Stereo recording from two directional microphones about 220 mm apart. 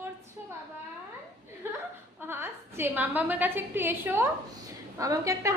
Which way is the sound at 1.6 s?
10° right (ahead or behind).